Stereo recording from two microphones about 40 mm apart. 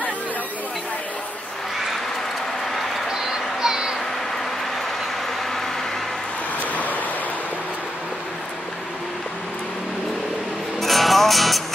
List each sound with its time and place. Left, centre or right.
3.1 s a sound: centre
6.7 s vehicle: left
10.8 s music: centre